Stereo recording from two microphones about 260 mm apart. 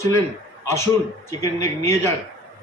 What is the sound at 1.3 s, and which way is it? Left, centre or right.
Speech, centre.